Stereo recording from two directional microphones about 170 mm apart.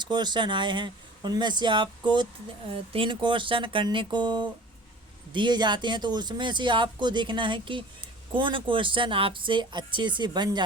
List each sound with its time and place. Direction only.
0.0 s speech: 25° right (ahead or behind)